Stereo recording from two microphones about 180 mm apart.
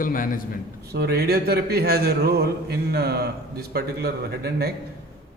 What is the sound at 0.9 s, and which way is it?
Speech, 65° right (ahead or behind).